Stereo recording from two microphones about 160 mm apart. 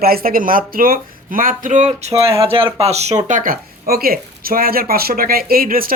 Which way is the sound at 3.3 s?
55° right (ahead or behind).